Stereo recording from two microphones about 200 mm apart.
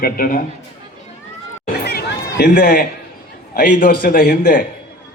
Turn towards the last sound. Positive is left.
turn(degrees=45)  # may be behind; listen again after turning